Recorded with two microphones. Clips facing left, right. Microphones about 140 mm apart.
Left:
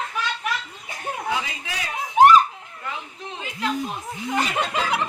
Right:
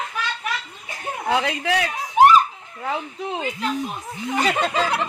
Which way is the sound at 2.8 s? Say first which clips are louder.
Right 8 dB; 90° right.